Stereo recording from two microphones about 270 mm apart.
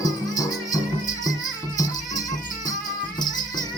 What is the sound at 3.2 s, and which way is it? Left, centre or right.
Music, centre.